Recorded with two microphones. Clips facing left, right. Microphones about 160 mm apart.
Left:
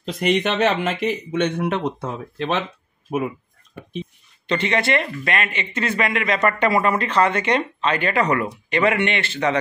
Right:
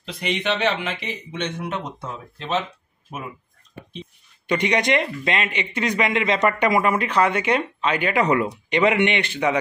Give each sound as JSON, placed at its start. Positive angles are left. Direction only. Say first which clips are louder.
{"t": 0.0, "sound": "speech", "louder": "left 6 dB", "side_deg": 45}
{"t": 4.5, "sound": "speech", "louder": "even", "side_deg": -15}